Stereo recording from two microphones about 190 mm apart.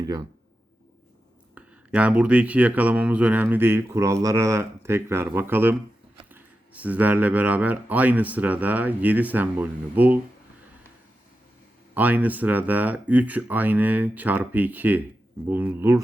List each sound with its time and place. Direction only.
1.5 s speech: 5° right (ahead or behind)
11.9 s speech: 10° right (ahead or behind)